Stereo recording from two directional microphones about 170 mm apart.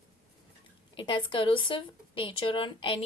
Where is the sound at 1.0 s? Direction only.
30° left (ahead or behind).